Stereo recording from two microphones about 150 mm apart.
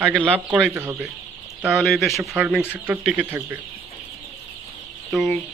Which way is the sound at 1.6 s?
Centre (ahead or behind).